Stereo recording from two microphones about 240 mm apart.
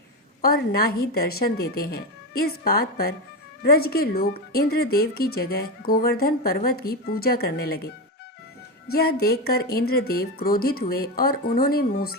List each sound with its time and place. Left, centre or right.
0.4 s speech: left
8.9 s speech: left